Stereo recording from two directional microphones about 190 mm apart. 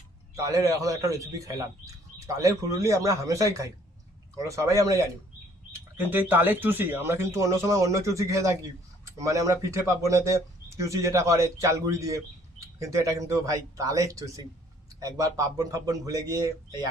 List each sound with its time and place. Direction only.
0.4 s speech: 15° right (ahead or behind)